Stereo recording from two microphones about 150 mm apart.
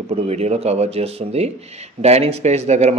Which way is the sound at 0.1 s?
45° right (ahead or behind).